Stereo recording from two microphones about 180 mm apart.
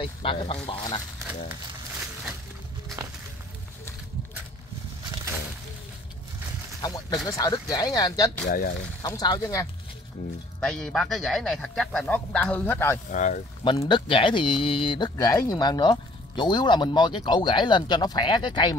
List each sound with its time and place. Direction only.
0.0 s speech: 30° left (ahead or behind)
7.2 s speech: 20° left (ahead or behind)
8.5 s speech: 55° left (ahead or behind)
9.0 s speech: 20° left (ahead or behind)
10.2 s speech: 55° left (ahead or behind)
10.6 s speech: 5° left (ahead or behind)
13.1 s speech: 45° left (ahead or behind)
13.7 s speech: 25° left (ahead or behind)